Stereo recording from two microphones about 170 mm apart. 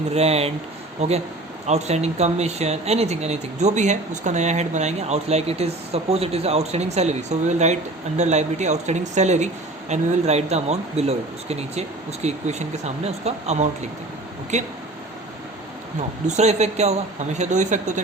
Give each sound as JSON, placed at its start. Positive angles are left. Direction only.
{"t": 0.1, "sound": "speech", "side_deg": -40}
{"t": 16.2, "sound": "speech", "side_deg": -40}